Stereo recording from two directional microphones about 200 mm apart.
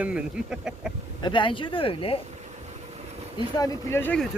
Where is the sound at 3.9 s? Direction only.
10° left (ahead or behind).